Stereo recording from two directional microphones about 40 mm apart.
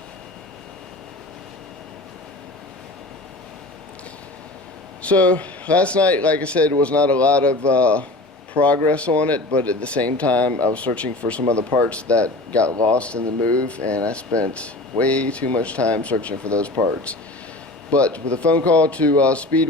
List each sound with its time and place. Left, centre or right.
5.0 s speech: left